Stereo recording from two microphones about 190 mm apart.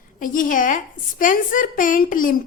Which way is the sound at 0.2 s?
45° left (ahead or behind).